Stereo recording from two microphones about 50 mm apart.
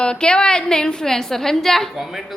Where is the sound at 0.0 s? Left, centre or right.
Centre.